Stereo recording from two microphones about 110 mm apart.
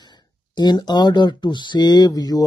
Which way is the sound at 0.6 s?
40° left (ahead or behind).